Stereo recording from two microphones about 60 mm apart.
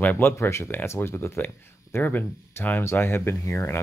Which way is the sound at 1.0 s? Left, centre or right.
Left.